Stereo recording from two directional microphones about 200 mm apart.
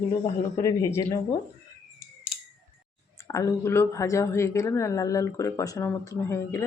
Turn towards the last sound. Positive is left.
turn(degrees=15)  # may be behind; listen again after turning